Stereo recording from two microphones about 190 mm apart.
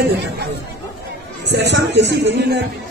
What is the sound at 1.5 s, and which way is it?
A man's voice, 65° right (ahead or behind).